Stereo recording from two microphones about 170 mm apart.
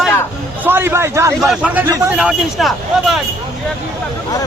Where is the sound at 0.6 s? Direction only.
15° right (ahead or behind).